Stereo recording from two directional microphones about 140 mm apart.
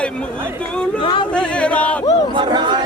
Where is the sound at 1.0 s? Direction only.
35° left (ahead or behind).